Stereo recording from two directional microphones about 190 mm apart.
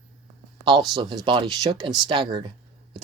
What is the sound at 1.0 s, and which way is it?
Speech, 25° right (ahead or behind).